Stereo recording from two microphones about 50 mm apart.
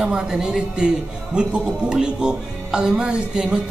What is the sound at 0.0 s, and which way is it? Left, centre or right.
Speech, centre.